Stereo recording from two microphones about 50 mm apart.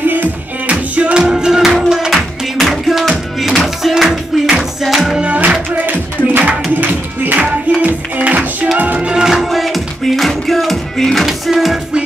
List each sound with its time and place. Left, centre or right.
0.0 s music: right; by 2.1 s centre
2.6 s a sound: centre
4.8 s music: centre
5.2 s music: right
9.1 s music: centre
11.2 s music: centre